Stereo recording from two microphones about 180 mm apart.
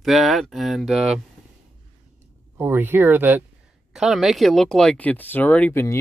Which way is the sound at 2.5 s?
10° right (ahead or behind).